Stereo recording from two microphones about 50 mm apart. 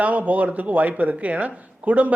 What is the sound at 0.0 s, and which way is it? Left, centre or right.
A man's voice, right.